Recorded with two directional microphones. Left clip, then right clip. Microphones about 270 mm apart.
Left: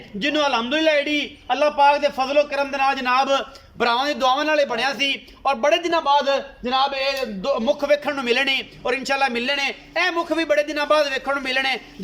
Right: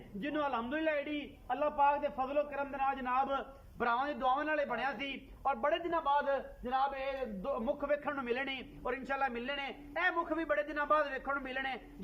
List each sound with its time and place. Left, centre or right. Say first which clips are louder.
0.2 s a man's voice: left 15 dB; centre